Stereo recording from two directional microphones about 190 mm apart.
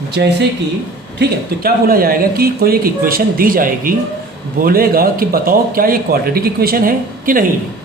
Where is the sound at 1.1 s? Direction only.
55° right (ahead or behind).